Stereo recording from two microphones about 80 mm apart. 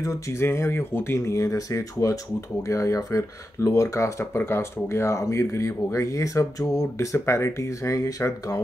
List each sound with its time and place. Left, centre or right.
0.0 s speech: left